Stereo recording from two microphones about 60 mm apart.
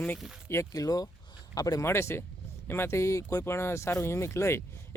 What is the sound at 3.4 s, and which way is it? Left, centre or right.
Speech, left.